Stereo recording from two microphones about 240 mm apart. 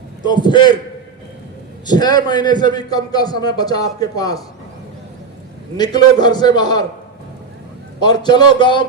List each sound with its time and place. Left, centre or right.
0.3 s a man's voice: centre
1.9 s a man's voice: centre
5.7 s a man's voice: centre
8.0 s a man's voice: centre